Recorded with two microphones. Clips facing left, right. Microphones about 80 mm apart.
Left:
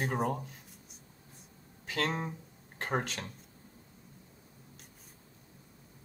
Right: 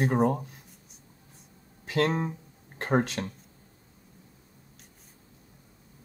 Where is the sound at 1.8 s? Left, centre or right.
Right.